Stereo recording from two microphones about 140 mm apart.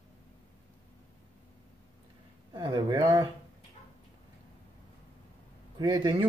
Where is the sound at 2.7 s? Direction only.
30° right (ahead or behind).